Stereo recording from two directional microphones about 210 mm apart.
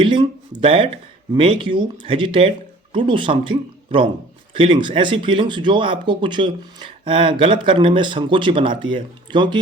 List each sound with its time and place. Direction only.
0.0 s speech: 25° right (ahead or behind)